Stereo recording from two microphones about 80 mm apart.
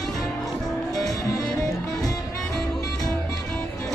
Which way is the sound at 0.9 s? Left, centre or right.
Left.